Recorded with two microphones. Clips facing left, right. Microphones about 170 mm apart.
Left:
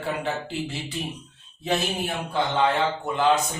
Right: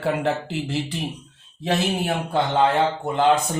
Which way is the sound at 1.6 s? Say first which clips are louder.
Right 3 dB; 55° right (ahead or behind).